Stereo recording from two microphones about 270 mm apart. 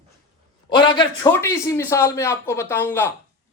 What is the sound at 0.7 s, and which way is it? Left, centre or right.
Speech, centre.